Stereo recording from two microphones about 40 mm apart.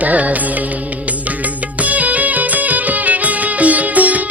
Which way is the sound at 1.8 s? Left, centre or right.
Right.